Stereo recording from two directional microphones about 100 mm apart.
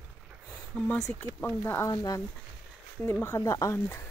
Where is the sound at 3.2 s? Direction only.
25° left (ahead or behind).